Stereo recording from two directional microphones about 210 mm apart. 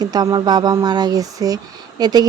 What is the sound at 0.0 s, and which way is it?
Speech, 20° right (ahead or behind).